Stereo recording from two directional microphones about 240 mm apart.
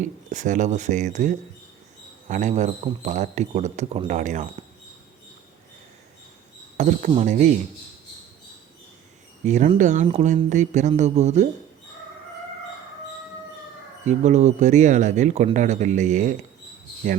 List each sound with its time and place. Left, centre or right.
0.0 s a man's voice: right
6.7 s speech: right
9.5 s a man's voice: right
14.1 s speech: right